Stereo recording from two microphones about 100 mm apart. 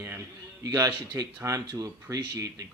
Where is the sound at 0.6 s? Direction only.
35° right (ahead or behind).